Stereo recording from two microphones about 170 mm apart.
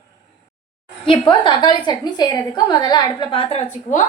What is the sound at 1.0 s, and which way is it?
A woman's voice, 30° left (ahead or behind).